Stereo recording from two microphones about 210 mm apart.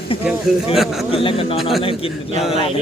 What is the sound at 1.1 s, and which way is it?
Speech, 25° left (ahead or behind).